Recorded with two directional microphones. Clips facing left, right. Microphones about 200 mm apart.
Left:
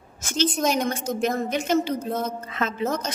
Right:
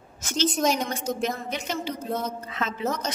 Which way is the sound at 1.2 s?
50° left (ahead or behind).